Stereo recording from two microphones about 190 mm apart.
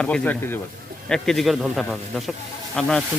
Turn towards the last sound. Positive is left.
turn(degrees=5)  # may be behind; listen again after turning